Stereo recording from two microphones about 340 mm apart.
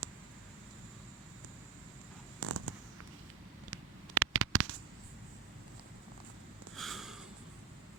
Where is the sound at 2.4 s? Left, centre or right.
Right.